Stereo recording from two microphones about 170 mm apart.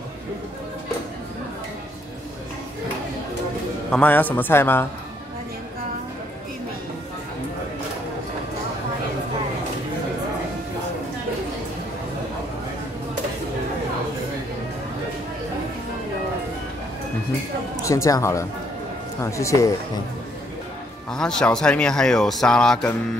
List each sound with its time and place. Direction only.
3.9 s a man's voice: 10° left (ahead or behind)
17.8 s a man's voice: 20° left (ahead or behind)
21.1 s speech: 5° left (ahead or behind)